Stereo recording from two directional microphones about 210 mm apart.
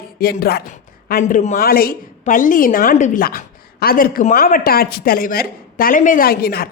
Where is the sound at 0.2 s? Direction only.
50° left (ahead or behind).